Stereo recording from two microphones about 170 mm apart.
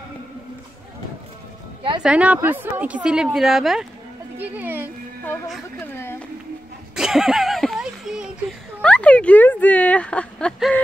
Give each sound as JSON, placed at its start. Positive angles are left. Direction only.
{"t": 2.0, "sound": "speech", "side_deg": -5}
{"t": 7.0, "sound": "a sound", "side_deg": -5}
{"t": 8.8, "sound": "speech", "side_deg": 5}